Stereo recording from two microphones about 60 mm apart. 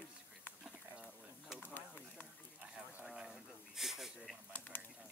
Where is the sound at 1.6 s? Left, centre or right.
Left.